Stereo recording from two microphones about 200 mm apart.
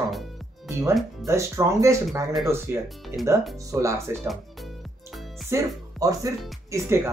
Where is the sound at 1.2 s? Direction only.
15° right (ahead or behind).